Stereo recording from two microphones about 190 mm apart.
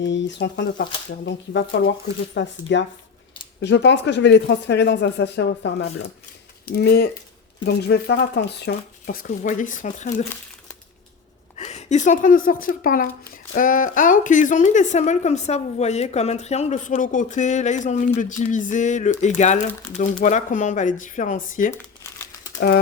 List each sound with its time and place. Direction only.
0.0 s speech: 70° left (ahead or behind)
6.7 s speech: 55° left (ahead or behind); by 10.2 s 40° left (ahead or behind)
11.5 s speech: 35° left (ahead or behind)
22.6 s speech: 60° left (ahead or behind)